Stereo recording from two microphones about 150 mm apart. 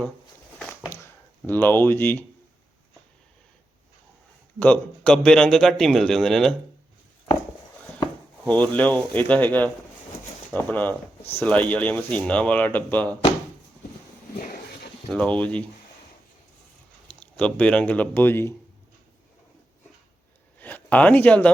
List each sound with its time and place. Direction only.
1.5 s speech: 15° left (ahead or behind)
4.6 s a man's voice: 5° left (ahead or behind)
7.9 s speech: 15° left (ahead or behind)
14.3 s a sound: 70° left (ahead or behind)
15.1 s speech: 10° left (ahead or behind)
17.2 s speech: 10° left (ahead or behind)
20.6 s a sound: 10° left (ahead or behind)